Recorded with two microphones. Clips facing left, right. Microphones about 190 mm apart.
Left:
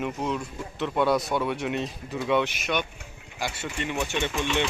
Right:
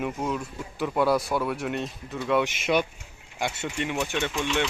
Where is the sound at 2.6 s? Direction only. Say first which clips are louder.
Right 4 dB; 30° right (ahead or behind).